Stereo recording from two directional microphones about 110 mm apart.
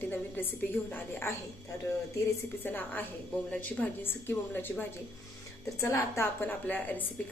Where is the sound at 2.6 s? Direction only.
15° left (ahead or behind).